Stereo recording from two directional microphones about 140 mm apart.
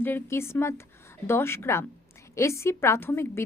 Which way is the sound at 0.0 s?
15° left (ahead or behind).